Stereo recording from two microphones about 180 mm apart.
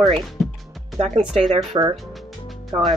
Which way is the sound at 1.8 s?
20° right (ahead or behind).